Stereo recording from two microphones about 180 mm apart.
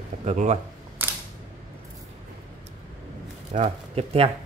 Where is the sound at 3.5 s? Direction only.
35° right (ahead or behind).